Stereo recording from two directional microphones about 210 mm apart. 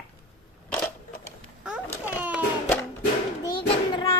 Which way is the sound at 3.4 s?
20° left (ahead or behind).